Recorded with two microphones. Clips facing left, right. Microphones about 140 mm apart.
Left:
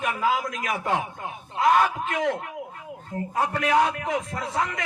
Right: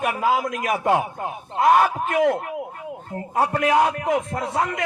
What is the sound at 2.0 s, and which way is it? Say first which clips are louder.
Speech: right 6 dB; 50° right (ahead or behind).